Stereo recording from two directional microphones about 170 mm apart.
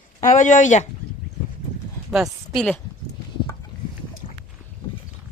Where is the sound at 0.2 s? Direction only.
45° left (ahead or behind).